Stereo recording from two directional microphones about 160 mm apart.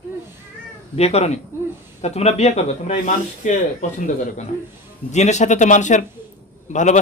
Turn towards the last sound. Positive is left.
turn(degrees=50)  # may be behind; listen again after turning